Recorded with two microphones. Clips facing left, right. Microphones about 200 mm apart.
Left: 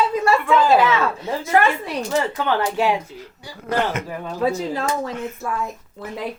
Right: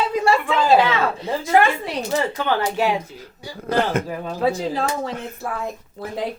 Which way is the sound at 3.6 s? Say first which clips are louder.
Right 2 dB; 30° right (ahead or behind).